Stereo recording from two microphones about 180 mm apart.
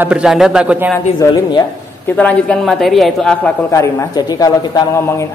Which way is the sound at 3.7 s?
15° left (ahead or behind).